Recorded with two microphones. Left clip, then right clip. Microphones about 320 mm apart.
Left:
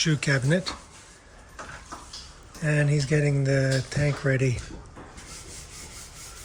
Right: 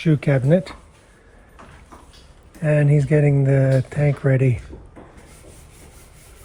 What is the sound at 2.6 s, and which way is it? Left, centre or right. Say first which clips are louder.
Speech: right 7 dB; centre.